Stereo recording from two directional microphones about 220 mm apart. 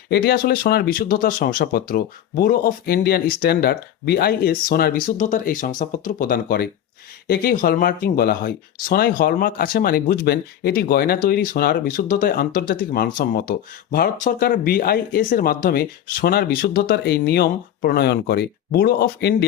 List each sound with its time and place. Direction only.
0.1 s speech: 45° left (ahead or behind)